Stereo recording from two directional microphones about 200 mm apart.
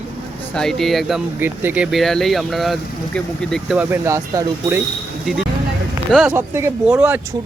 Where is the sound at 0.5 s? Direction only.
Centre (ahead or behind).